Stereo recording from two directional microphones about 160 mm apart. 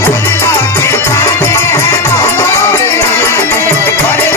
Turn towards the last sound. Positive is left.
turn(degrees=15)  # may be behind; listen again after turning